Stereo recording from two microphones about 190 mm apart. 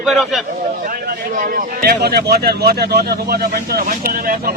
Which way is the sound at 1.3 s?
45° right (ahead or behind).